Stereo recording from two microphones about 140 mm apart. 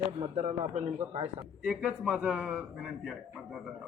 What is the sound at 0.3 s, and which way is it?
Speech, 50° right (ahead or behind).